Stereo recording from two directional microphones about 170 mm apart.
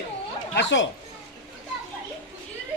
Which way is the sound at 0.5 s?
90° left.